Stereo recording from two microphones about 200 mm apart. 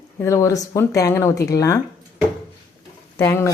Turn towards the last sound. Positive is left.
turn(degrees=10)  # may be behind; listen again after turning